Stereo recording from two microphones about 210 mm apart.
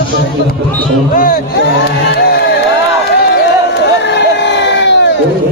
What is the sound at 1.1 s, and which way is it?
Speech, 45° left (ahead or behind).